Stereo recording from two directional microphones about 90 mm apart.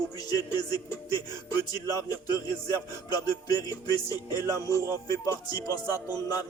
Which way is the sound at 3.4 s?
40° left (ahead or behind).